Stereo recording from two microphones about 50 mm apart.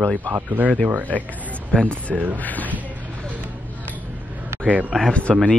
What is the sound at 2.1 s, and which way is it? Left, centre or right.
Speech, right.